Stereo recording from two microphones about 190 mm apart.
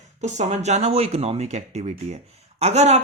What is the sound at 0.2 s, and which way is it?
Speech, 35° right (ahead or behind).